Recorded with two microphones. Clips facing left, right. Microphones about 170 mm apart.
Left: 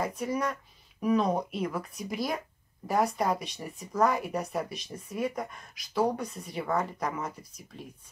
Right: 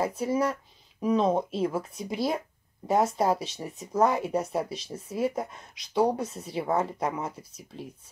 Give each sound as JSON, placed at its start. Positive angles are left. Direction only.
{"t": 0.0, "sound": "speech", "side_deg": -25}